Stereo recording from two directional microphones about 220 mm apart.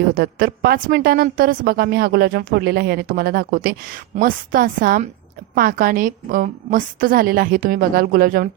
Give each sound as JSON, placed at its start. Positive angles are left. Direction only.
{"t": 0.1, "sound": "a woman's voice", "side_deg": -40}